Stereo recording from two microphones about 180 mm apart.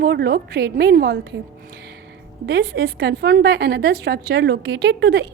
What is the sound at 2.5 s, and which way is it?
A woman's voice, 75° right (ahead or behind).